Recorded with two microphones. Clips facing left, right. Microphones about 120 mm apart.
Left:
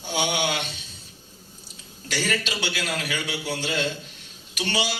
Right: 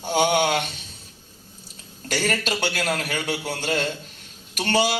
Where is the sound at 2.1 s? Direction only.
50° right (ahead or behind).